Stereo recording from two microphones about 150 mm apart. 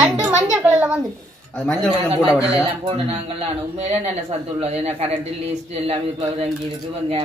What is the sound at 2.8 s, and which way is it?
Speech, 40° right (ahead or behind).